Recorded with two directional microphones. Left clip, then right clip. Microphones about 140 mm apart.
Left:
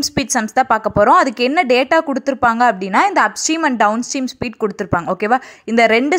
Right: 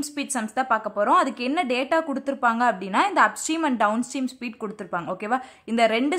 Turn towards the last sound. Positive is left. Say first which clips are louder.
# left 9 dB
turn(degrees=45)  # may be behind; listen again after turning